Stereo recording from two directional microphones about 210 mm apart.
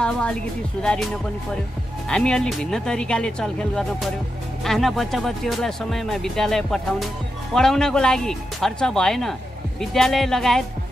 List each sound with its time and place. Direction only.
0.0 s speech: 5° left (ahead or behind)
2.0 s speech: 5° left (ahead or behind)